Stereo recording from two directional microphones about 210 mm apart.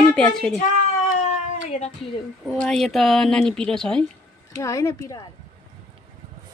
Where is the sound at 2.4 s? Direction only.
5° left (ahead or behind).